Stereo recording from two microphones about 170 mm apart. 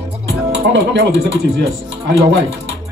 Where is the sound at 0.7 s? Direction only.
90° right.